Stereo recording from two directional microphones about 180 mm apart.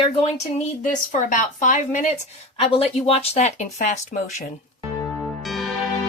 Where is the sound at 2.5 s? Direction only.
30° left (ahead or behind).